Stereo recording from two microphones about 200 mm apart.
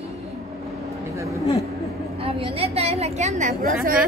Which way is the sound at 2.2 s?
30° right (ahead or behind).